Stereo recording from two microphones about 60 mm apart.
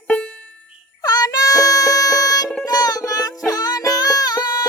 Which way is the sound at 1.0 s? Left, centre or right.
Left.